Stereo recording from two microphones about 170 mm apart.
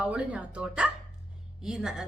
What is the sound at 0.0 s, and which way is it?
A woman's voice, 10° right (ahead or behind).